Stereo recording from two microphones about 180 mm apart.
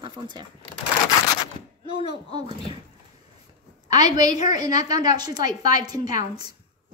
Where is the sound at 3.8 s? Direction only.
20° right (ahead or behind).